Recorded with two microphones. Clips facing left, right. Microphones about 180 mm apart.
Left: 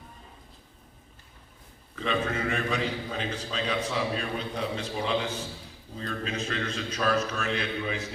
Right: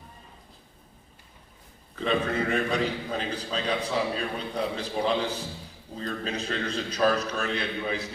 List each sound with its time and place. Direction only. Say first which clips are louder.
2.0 s a man's voice: right 3 dB; 35° right (ahead or behind)